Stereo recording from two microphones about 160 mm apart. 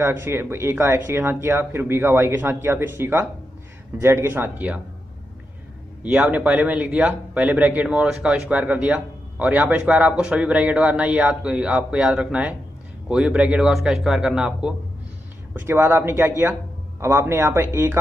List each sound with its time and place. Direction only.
0.0 s a man's voice: 15° right (ahead or behind)
6.0 s a man's voice: 10° right (ahead or behind)